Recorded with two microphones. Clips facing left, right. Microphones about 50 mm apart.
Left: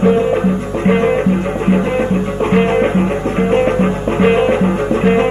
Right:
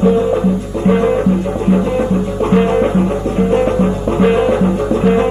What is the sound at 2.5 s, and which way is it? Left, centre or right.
Music, left.